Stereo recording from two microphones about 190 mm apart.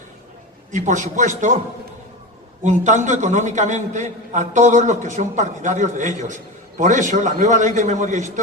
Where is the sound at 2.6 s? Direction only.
40° right (ahead or behind).